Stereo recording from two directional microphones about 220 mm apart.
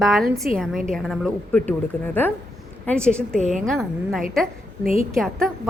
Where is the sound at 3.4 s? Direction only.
30° right (ahead or behind).